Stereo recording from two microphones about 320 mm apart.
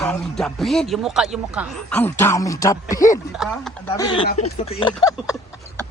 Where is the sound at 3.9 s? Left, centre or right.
Centre.